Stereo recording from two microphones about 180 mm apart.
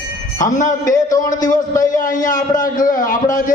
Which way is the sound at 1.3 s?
45° left (ahead or behind).